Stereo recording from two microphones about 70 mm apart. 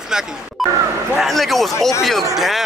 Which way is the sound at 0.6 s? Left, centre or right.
Centre.